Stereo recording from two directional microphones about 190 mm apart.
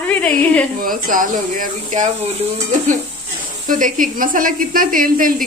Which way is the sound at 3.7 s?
45° right (ahead or behind).